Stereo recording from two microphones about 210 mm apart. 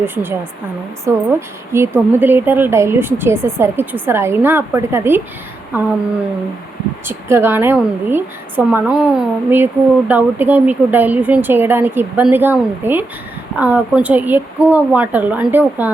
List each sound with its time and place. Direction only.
0.0 s a woman's voice: 10° right (ahead or behind)
7.1 s a woman's voice: 10° right (ahead or behind)